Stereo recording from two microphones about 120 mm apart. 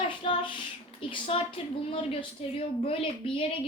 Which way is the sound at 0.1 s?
45° left (ahead or behind).